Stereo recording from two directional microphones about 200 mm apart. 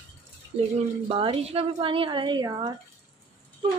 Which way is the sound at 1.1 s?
25° right (ahead or behind).